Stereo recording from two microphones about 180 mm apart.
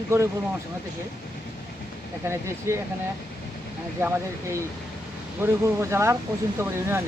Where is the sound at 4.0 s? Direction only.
10° right (ahead or behind).